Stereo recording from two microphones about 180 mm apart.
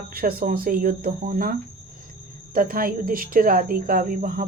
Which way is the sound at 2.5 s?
50° right (ahead or behind).